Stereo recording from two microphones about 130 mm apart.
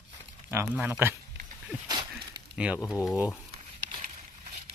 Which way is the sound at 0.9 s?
20° right (ahead or behind).